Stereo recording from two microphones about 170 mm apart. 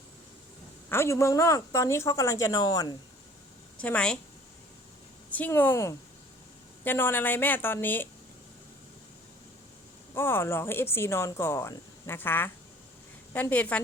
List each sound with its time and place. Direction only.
0.9 s speech: 15° left (ahead or behind)
3.8 s speech: 5° left (ahead or behind)
5.3 s speech: 10° left (ahead or behind)
10.2 s speech: 15° left (ahead or behind)